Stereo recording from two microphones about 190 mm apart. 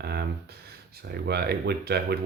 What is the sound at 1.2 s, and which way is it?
Speech, 60° right (ahead or behind).